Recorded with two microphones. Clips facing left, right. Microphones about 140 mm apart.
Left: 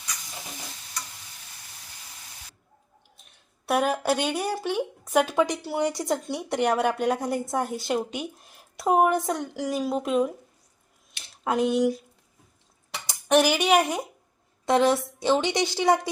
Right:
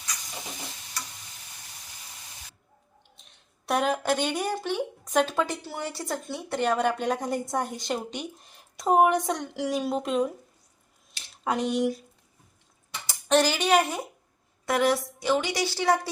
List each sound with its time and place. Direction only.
3.7 s a woman's voice: 10° left (ahead or behind)
11.4 s speech: centre (ahead or behind)
13.1 s a woman's voice: 15° left (ahead or behind)